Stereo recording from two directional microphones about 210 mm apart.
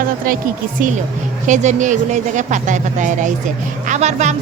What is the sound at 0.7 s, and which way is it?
Speech, 40° right (ahead or behind).